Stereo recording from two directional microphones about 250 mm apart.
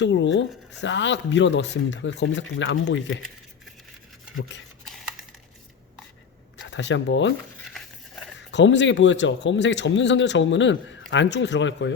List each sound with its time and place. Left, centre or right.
0.0 s a man's voice: left
6.7 s a man's voice: left
8.4 s a man's voice: left